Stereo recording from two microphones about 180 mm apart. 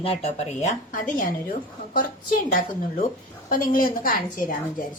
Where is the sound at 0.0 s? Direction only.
35° left (ahead or behind); by 4.5 s 55° left (ahead or behind).